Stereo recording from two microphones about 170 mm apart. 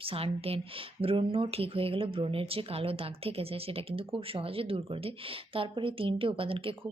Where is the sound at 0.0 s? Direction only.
35° right (ahead or behind).